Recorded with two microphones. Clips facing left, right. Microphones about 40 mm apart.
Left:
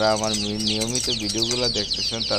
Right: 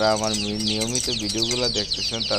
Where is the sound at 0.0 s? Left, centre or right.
Centre.